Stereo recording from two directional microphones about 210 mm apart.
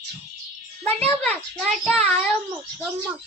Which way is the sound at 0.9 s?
30° right (ahead or behind).